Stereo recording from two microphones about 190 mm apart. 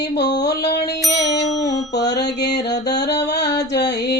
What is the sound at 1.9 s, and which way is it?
Mantra, 65° left (ahead or behind).